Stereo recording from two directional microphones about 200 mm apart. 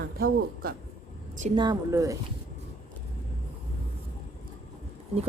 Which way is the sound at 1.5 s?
20° right (ahead or behind).